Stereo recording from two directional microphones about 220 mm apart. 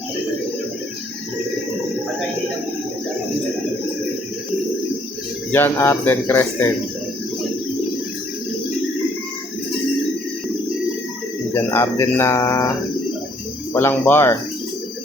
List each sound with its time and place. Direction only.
5.5 s speech: 10° left (ahead or behind)
11.5 s speech: 10° left (ahead or behind)
13.7 s speech: 10° left (ahead or behind)